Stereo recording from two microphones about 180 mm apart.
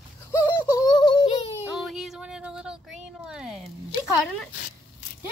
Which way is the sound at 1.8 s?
Centre (ahead or behind).